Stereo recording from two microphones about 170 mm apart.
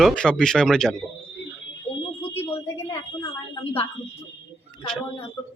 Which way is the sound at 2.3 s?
15° left (ahead or behind).